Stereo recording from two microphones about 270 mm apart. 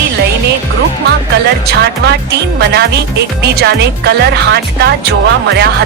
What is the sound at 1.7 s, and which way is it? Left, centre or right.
Speech, right.